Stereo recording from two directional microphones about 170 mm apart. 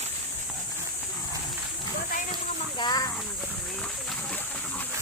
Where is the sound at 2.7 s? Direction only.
25° left (ahead or behind).